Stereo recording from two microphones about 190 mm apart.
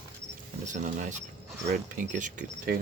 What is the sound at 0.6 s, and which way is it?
Speech, 40° right (ahead or behind).